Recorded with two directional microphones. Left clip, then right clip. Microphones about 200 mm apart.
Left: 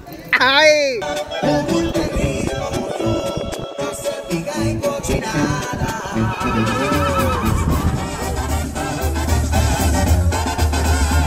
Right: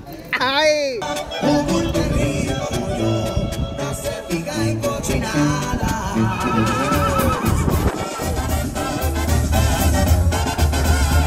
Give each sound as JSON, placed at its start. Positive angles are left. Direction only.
{"t": 0.3, "sound": "speech", "side_deg": 5}
{"t": 1.4, "sound": "music", "side_deg": -60}
{"t": 4.3, "sound": "music", "side_deg": -50}
{"t": 6.1, "sound": "neigh", "side_deg": -55}
{"t": 9.6, "sound": "music", "side_deg": -30}